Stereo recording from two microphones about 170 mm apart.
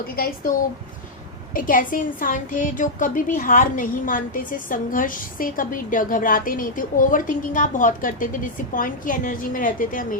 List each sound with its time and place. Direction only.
0.2 s a woman's voice: 60° left (ahead or behind)
1.5 s a woman's voice: 55° left (ahead or behind)